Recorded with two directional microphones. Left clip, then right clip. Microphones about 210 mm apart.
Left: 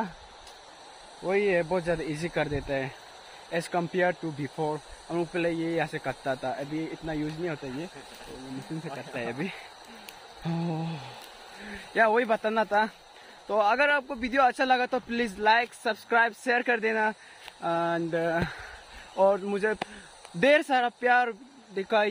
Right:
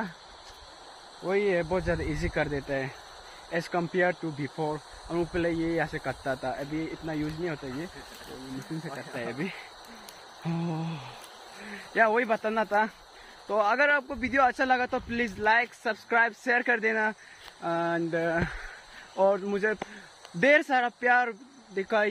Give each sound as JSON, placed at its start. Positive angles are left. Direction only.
{"t": 1.2, "sound": "speech", "side_deg": 10}
{"t": 10.4, "sound": "a sound", "side_deg": 15}
{"t": 11.6, "sound": "speech", "side_deg": 10}